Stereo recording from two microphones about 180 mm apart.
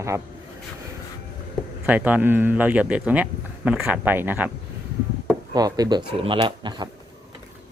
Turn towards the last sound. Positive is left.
turn(degrees=-25)  # may be behind; listen again after turning